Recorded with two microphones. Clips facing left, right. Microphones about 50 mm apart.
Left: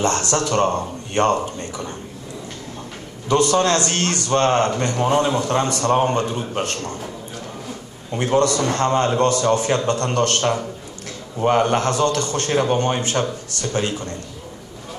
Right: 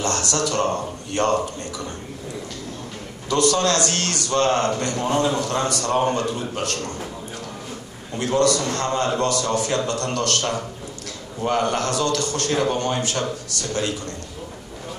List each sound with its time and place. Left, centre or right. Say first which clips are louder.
0.0 s a man's voice: left 3 dB; left
3.3 s a man's voice: left 3 dB; left
8.2 s a man's voice: left 2 dB; left